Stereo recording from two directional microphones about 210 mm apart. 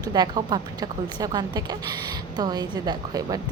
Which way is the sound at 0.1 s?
20° right (ahead or behind).